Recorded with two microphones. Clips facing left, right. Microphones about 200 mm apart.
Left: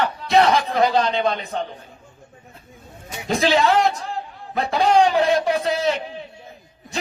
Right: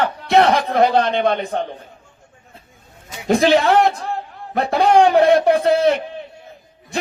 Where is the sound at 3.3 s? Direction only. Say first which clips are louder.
Right 4 dB; 55° right (ahead or behind).